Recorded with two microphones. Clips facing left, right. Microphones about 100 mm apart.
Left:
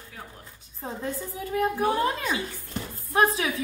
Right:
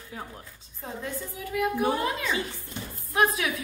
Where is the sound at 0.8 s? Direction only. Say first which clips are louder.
Left 3 dB; 30° left (ahead or behind).